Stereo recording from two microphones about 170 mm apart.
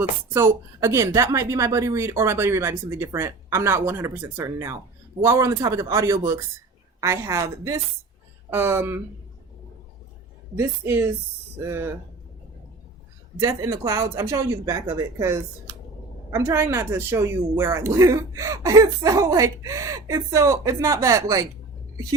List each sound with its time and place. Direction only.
0.3 s a woman's voice: 15° right (ahead or behind)
10.6 s a woman's voice: 15° right (ahead or behind)
13.4 s speech: 20° right (ahead or behind)